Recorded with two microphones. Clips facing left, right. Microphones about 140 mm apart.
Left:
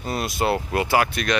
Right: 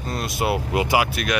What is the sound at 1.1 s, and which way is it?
Speech, 5° right (ahead or behind).